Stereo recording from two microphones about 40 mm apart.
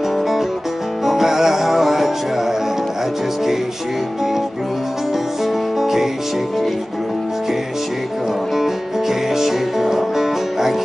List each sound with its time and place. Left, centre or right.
1.0 s music: centre
5.4 s music: centre
9.3 s music: centre